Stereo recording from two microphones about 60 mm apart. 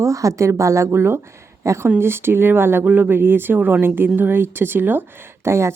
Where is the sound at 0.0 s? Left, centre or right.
Right.